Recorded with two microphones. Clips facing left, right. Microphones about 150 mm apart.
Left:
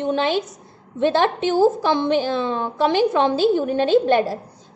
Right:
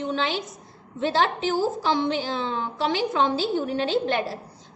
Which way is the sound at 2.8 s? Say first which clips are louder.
Left 6 dB; 50° left (ahead or behind).